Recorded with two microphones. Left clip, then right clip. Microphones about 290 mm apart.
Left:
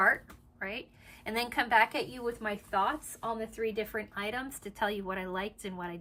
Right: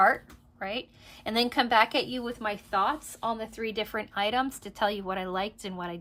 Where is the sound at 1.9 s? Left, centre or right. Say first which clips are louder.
Right 5 dB; centre.